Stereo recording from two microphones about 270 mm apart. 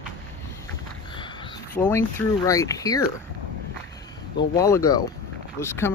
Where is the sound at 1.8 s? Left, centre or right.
Centre.